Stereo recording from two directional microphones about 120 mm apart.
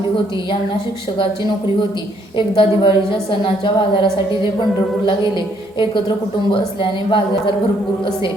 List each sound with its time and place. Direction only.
2.6 s a woman's voice: 45° left (ahead or behind)
5.8 s a woman's voice: 45° left (ahead or behind)